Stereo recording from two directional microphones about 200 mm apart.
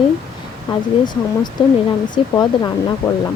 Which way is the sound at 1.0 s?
20° left (ahead or behind).